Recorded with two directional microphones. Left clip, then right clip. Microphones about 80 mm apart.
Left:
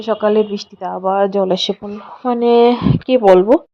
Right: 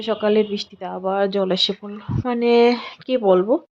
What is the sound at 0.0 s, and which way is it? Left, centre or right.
A woman's voice, centre.